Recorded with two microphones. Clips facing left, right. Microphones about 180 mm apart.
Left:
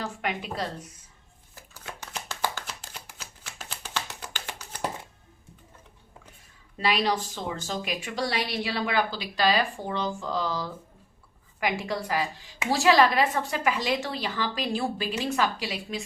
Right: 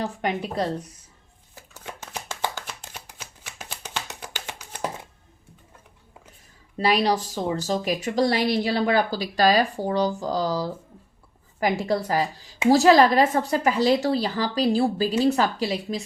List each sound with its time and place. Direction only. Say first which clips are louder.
0.0 s a woman's voice: right 5 dB; 35° right (ahead or behind)
1.8 s a sound: right 2 dB; 20° right (ahead or behind)
3.2 s shuffling cards: right 2 dB; 15° right (ahead or behind)
6.7 s a woman's voice: right 4 dB; 35° right (ahead or behind)